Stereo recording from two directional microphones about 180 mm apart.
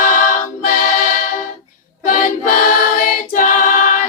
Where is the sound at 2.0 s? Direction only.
50° left (ahead or behind).